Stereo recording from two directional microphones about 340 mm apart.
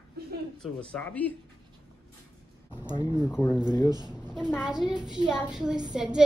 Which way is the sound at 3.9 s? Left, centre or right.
Centre.